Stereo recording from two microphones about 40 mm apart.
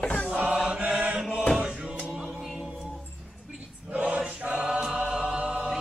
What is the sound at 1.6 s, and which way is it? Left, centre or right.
Music, right.